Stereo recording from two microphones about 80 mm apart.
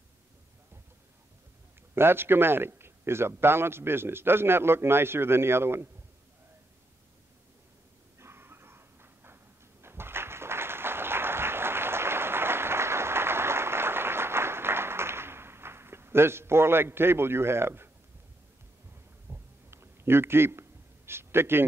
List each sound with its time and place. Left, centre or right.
2.0 s a man's voice: right
8.2 s dog: right
19.3 s a sound: right